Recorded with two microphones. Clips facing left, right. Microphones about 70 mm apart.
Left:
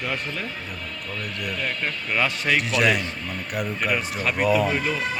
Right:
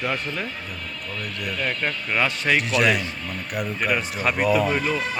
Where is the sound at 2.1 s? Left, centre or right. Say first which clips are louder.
Right 1 dB; centre.